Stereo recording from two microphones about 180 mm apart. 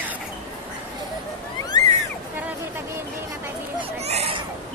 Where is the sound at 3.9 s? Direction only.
35° right (ahead or behind).